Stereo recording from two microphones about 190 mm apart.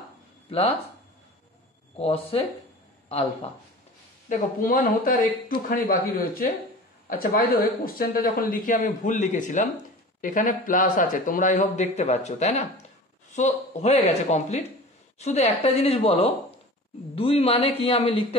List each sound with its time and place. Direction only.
0.5 s speech: 30° left (ahead or behind)
2.0 s speech: 30° left (ahead or behind)
4.3 s speech: 50° left (ahead or behind); by 18.2 s 30° left (ahead or behind)